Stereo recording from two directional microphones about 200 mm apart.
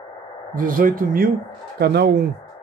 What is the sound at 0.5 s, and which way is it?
Speech, 45° right (ahead or behind).